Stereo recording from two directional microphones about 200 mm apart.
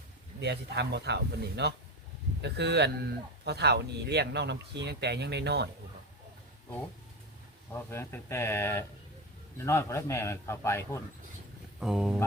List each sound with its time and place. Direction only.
0.3 s speech: 55° right (ahead or behind)
7.7 s a man's voice: 10° left (ahead or behind)
11.8 s speech: 5° right (ahead or behind)